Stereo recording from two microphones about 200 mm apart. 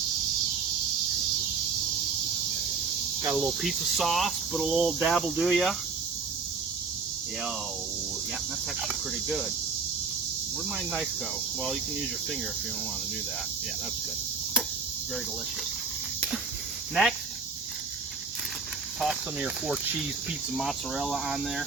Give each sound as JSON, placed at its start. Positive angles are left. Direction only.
{"t": 3.2, "sound": "cricket", "side_deg": -5}
{"t": 16.9, "sound": "speech", "side_deg": 0}
{"t": 18.9, "sound": "speech", "side_deg": 0}
{"t": 20.6, "sound": "cricket", "side_deg": 0}